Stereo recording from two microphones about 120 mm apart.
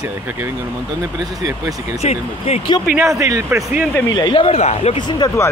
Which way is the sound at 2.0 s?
60° left (ahead or behind).